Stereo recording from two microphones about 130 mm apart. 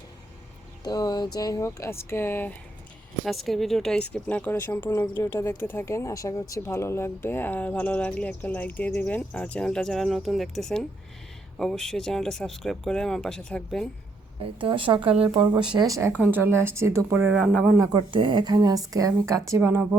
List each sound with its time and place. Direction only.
0.9 s speech: 30° left (ahead or behind)
3.2 s speech: centre (ahead or behind)
14.4 s speech: 40° right (ahead or behind)
16.0 s speech: 20° right (ahead or behind)
17.7 s speech: 35° right (ahead or behind); by 20.0 s 20° right (ahead or behind)